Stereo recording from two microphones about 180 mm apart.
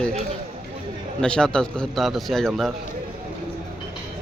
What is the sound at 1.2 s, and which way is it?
A man's voice, 5° left (ahead or behind).